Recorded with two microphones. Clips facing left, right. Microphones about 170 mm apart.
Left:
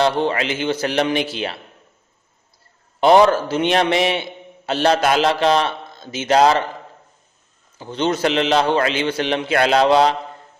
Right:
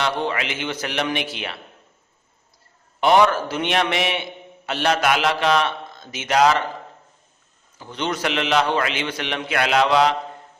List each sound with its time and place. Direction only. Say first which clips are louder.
0.0 s a man's voice: left 6 dB; 30° left (ahead or behind)
3.0 s a man's voice: left 4 dB; 30° left (ahead or behind)
7.8 s a man's voice: left 6 dB; 30° left (ahead or behind)